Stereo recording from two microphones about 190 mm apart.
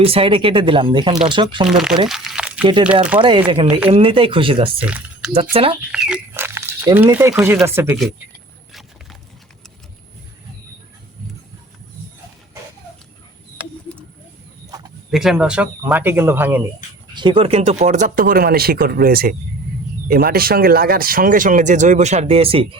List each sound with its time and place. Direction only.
0.0 s speech: 30° right (ahead or behind)
1.6 s speech: 5° right (ahead or behind)
3.2 s speech: 25° right (ahead or behind)
4.8 s speech: 5° right (ahead or behind)
5.9 s a sound: 5° right (ahead or behind)
7.3 s speech: 10° right (ahead or behind)
15.1 s speech: centre (ahead or behind)
17.2 s speech: 25° right (ahead or behind)